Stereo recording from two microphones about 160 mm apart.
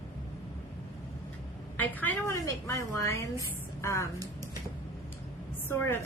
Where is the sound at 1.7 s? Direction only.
10° left (ahead or behind).